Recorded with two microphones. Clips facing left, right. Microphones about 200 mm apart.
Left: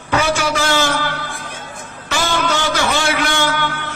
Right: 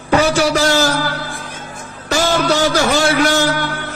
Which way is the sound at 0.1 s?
35° right (ahead or behind).